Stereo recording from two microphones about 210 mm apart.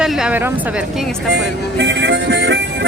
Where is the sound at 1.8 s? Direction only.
60° right (ahead or behind).